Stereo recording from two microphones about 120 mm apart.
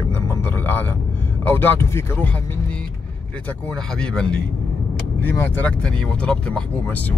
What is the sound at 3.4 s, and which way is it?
Speech, 10° left (ahead or behind).